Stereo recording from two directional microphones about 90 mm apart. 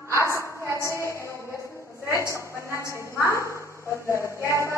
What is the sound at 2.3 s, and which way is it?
Speech, 30° right (ahead or behind).